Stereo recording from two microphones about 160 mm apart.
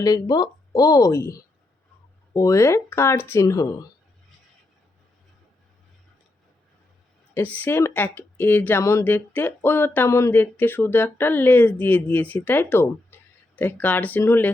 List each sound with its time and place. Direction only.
0.0 s speech: 25° left (ahead or behind)
7.3 s speech: 10° left (ahead or behind)